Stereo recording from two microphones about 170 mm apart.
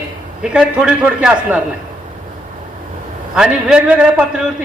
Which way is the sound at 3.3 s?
5° right (ahead or behind).